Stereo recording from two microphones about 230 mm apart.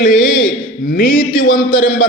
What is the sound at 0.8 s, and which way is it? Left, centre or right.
Speech, left.